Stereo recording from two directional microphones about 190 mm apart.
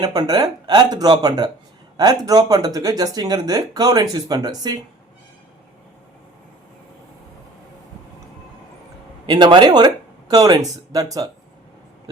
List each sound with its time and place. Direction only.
0.0 s speech: 20° right (ahead or behind)
9.2 s speech: 25° right (ahead or behind)